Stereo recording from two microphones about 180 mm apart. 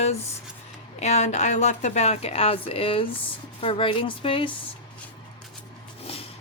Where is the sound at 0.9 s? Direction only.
40° left (ahead or behind).